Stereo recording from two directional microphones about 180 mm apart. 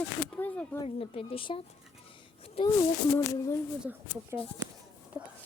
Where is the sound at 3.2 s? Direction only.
15° left (ahead or behind).